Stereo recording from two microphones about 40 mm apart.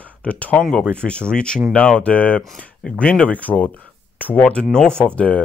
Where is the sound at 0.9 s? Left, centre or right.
Left.